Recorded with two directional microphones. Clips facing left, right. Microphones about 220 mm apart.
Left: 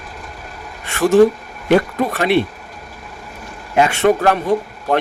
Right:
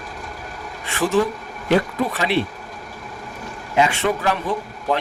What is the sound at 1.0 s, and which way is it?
Speech, 45° left (ahead or behind).